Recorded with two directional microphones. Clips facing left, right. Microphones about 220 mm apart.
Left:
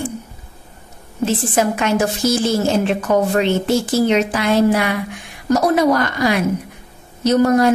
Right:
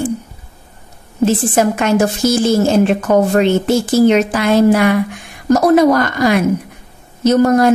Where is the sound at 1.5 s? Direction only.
45° right (ahead or behind).